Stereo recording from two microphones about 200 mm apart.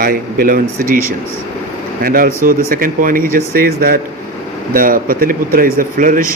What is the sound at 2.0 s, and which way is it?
A man's voice, 45° right (ahead or behind).